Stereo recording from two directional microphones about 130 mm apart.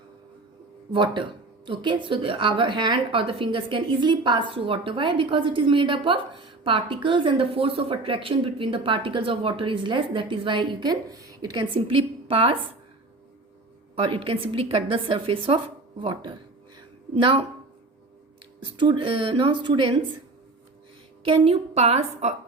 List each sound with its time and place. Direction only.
0.9 s speech: 40° right (ahead or behind)
13.9 s a woman's voice: 45° right (ahead or behind)
18.6 s speech: 40° right (ahead or behind)
21.2 s a woman's voice: 50° right (ahead or behind)